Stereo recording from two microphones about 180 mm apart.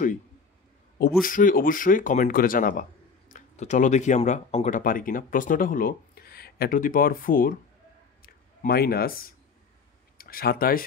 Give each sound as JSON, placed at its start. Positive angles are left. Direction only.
{"t": 1.2, "sound": "speech", "side_deg": 50}
{"t": 8.2, "sound": "a sound", "side_deg": 55}
{"t": 10.1, "sound": "speech", "side_deg": 55}